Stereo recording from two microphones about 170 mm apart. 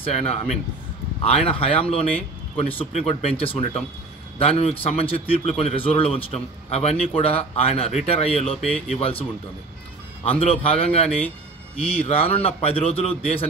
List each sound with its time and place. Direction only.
0.0 s a man's voice: 40° left (ahead or behind)
10.4 s a man's voice: 35° left (ahead or behind)